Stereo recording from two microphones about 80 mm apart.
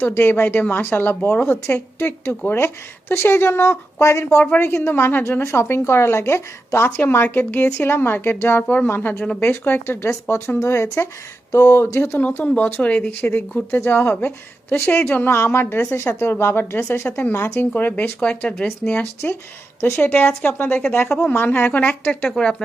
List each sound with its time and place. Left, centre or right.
0.0 s a woman's voice: left
11.9 s a woman's voice: left
17.1 s speech: centre